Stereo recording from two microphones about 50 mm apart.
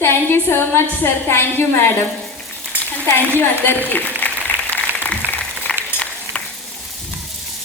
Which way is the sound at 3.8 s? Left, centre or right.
Left.